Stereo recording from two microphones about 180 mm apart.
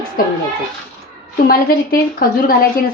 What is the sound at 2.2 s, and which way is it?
Speech, 55° left (ahead or behind).